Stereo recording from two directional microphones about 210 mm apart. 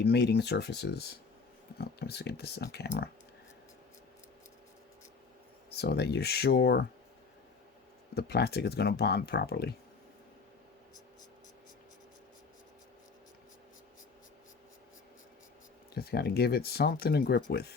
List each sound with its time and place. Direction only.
0.0 s speech: 50° left (ahead or behind)
5.7 s speech: 50° left (ahead or behind)
8.1 s speech: 50° left (ahead or behind)
16.0 s speech: 50° left (ahead or behind)